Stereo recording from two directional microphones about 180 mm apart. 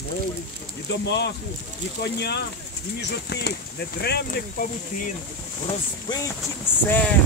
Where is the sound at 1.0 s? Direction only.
70° left (ahead or behind).